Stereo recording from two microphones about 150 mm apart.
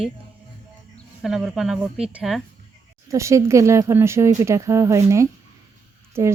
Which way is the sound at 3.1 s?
20° right (ahead or behind).